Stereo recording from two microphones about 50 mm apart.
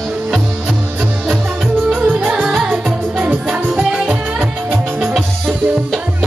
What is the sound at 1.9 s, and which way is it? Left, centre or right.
Music, right.